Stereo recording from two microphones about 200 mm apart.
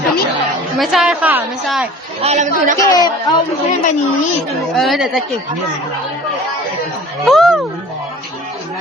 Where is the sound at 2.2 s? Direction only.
35° right (ahead or behind).